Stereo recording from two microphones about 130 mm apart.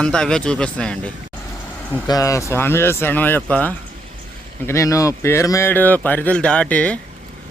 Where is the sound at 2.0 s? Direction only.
25° left (ahead or behind); by 3.8 s 10° left (ahead or behind).